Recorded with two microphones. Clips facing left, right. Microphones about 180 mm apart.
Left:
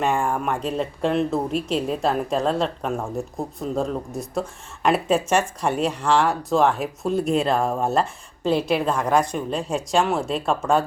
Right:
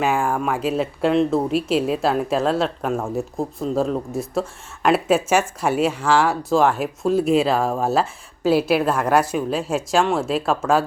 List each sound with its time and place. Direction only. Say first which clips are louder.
0.0 s speech: right 2 dB; 5° right (ahead or behind)